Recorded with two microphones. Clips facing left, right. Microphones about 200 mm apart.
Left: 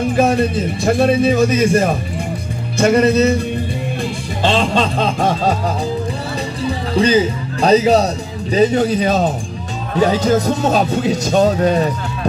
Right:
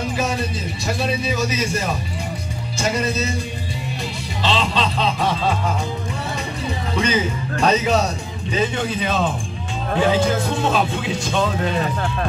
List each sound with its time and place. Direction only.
0.1 s a man's voice: 55° left (ahead or behind)
2.8 s music: 60° left (ahead or behind)
4.4 s a man's voice: 50° left (ahead or behind)
7.0 s speech: 35° left (ahead or behind)